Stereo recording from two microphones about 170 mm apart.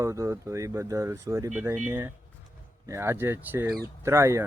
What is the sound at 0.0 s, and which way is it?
Speech, 15° right (ahead or behind).